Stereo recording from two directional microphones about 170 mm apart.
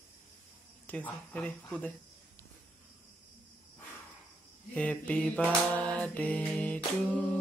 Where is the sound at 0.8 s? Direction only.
10° left (ahead or behind).